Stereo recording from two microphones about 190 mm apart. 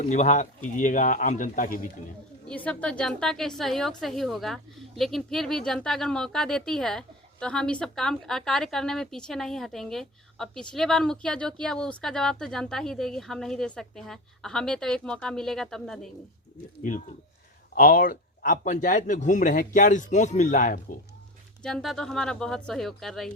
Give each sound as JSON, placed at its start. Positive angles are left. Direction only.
{"t": 0.0, "sound": "a man's voice", "side_deg": 40}
{"t": 2.5, "sound": "a woman's voice", "side_deg": 5}
{"t": 17.7, "sound": "a man's voice", "side_deg": 50}
{"t": 21.6, "sound": "a woman's voice", "side_deg": 0}